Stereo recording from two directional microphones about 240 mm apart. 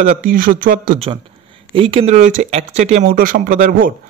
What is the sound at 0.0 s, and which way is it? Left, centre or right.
Speech, right.